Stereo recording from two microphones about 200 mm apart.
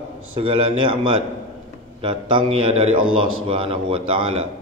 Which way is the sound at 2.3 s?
30° right (ahead or behind).